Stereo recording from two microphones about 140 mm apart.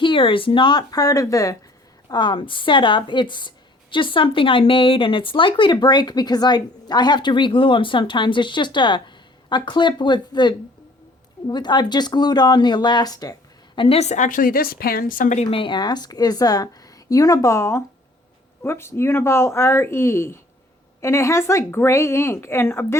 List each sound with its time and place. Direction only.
0.0 s speech: 35° left (ahead or behind)
13.7 s a woman's voice: 45° left (ahead or behind); by 15.4 s 65° left (ahead or behind)
15.4 s a woman's voice: 40° left (ahead or behind); by 23.0 s 20° left (ahead or behind)